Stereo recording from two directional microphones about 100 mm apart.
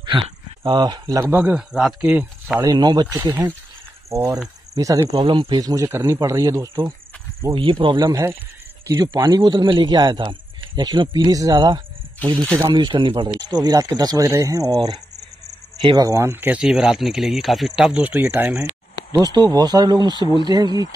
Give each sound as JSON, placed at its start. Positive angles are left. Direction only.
{"t": 0.0, "sound": "speech", "side_deg": -55}
{"t": 1.2, "sound": "speech", "side_deg": -20}
{"t": 1.7, "sound": "speech", "side_deg": -5}
{"t": 2.6, "sound": "speech", "side_deg": -40}
{"t": 4.1, "sound": "speech", "side_deg": -30}
{"t": 5.1, "sound": "a man's voice", "side_deg": -50}
{"t": 5.6, "sound": "speech", "side_deg": -40}
{"t": 5.9, "sound": "speech", "side_deg": -25}
{"t": 7.5, "sound": "speech", "side_deg": -60}
{"t": 8.0, "sound": "a man's voice", "side_deg": -30}
{"t": 13.4, "sound": "speech", "side_deg": -40}
{"t": 16.6, "sound": "speech", "side_deg": -5}
{"t": 19.2, "sound": "speech", "side_deg": -40}